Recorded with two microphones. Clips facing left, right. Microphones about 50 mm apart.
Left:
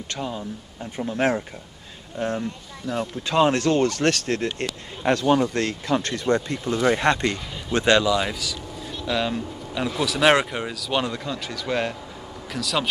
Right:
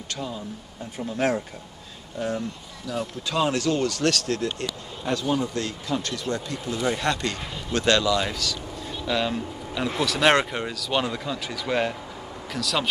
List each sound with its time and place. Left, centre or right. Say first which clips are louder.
0.1 s speech: left 2 dB; left
2.1 s speech: left 2 dB; left; by 12.8 s centre